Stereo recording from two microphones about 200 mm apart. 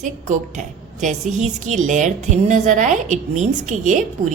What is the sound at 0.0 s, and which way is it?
A woman's voice, 40° right (ahead or behind).